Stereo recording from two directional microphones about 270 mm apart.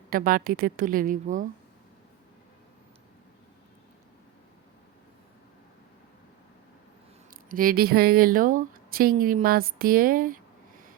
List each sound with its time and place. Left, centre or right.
0.1 s speech: right
7.3 s speech: right